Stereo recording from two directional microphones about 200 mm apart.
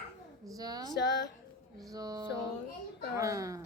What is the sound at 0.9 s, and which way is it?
Speech, 60° left (ahead or behind).